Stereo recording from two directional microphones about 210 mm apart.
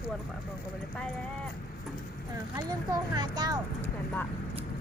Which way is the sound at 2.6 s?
20° right (ahead or behind).